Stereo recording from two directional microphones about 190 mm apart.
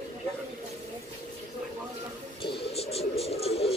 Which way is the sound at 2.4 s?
25° left (ahead or behind).